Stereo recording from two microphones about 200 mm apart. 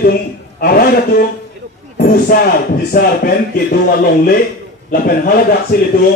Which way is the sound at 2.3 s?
50° left (ahead or behind).